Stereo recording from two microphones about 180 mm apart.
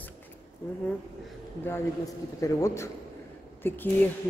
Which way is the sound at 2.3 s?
15° left (ahead or behind).